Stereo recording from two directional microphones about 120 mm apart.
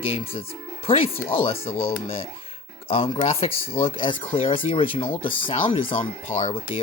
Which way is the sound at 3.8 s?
45° left (ahead or behind).